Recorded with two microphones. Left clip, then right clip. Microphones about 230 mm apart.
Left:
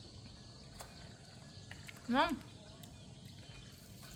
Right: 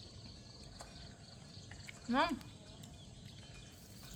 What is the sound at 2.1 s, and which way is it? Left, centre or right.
Speech, centre.